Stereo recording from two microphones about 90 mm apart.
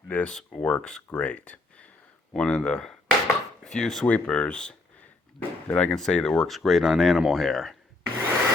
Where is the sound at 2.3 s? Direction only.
10° left (ahead or behind).